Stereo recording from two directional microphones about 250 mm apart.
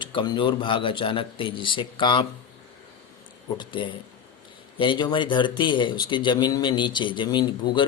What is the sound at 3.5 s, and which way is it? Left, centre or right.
A man's voice, centre.